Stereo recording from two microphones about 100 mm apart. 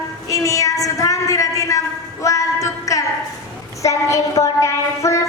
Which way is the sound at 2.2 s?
35° left (ahead or behind).